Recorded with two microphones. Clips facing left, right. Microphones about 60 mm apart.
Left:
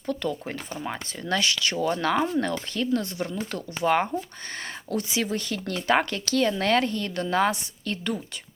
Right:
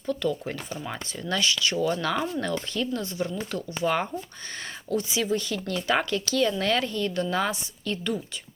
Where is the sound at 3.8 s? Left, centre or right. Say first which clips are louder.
Left 3 dB; left.